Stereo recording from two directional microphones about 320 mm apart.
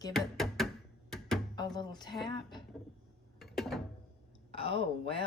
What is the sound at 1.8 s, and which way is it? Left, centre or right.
Speech, centre.